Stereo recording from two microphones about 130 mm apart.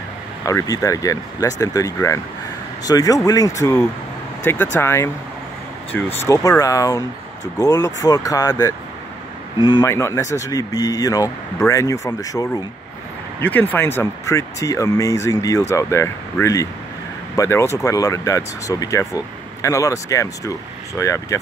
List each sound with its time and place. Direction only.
0.5 s speech: 25° left (ahead or behind)
6.1 s speech: 25° left (ahead or behind)
9.8 s speech: 20° left (ahead or behind)
13.4 s speech: 15° left (ahead or behind)